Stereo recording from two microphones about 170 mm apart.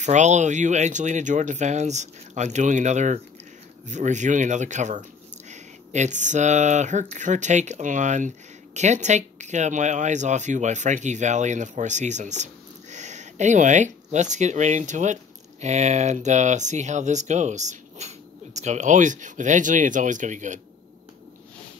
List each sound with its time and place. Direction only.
0.0 s speech: 45° right (ahead or behind)